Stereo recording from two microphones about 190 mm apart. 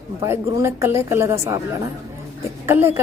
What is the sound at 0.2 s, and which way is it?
A woman's voice, 15° right (ahead or behind).